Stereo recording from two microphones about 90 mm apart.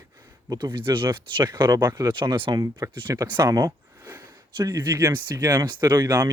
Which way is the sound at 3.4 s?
40° right (ahead or behind).